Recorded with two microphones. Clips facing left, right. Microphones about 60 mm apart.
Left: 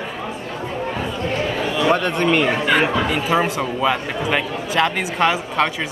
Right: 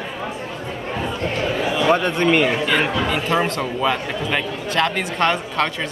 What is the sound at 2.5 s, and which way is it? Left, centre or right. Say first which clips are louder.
Speech: left 2 dB; centre.